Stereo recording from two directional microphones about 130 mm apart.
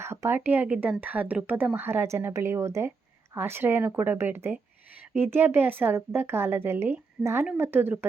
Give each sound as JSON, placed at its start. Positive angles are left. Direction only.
{"t": 0.0, "sound": "speech", "side_deg": -20}